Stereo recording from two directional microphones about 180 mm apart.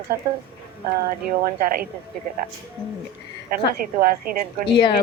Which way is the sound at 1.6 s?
55° right (ahead or behind).